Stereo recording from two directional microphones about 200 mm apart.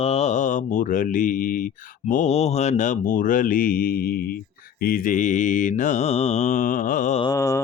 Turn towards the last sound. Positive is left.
turn(degrees=15)  # may be behind; listen again after turning